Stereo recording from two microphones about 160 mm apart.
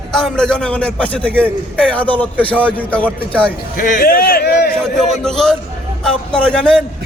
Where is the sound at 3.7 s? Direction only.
55° left (ahead or behind); by 4.7 s 75° left (ahead or behind).